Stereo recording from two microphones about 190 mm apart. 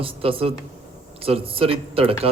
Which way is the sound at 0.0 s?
30° right (ahead or behind).